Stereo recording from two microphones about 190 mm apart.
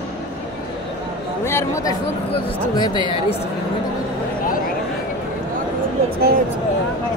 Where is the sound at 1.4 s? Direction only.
15° left (ahead or behind).